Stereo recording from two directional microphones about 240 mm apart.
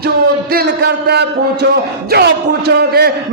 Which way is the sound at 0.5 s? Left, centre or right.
Right.